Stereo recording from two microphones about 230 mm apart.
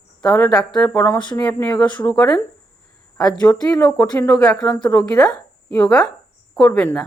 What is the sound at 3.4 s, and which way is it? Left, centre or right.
A woman's voice, centre.